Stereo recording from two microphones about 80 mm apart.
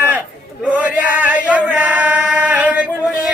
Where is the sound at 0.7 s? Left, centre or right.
Centre.